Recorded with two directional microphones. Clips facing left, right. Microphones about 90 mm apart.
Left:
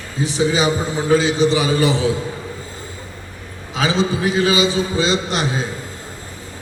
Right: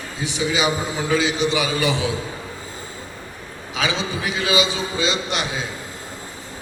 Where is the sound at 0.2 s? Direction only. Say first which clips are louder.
Left 5 dB; 35° left (ahead or behind).